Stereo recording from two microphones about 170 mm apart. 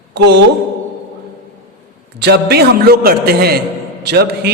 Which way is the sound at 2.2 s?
70° right (ahead or behind).